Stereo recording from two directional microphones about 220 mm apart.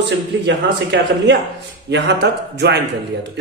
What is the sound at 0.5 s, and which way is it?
A man's voice, 55° right (ahead or behind).